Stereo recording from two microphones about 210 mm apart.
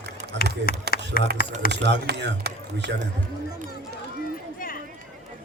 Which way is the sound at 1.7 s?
50° right (ahead or behind).